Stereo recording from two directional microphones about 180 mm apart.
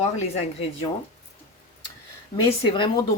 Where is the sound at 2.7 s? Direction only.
25° left (ahead or behind).